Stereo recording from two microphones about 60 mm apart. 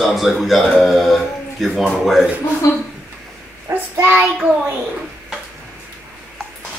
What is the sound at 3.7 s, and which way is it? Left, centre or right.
Child singing, right.